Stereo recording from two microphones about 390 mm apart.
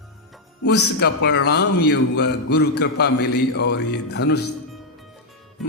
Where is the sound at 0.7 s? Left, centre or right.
Left.